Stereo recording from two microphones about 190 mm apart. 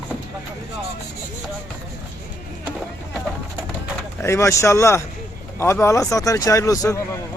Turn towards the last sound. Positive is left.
turn(degrees=15)  # may be behind; listen again after turning